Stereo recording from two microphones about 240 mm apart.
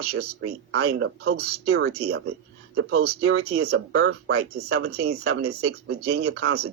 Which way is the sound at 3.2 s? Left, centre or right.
Right.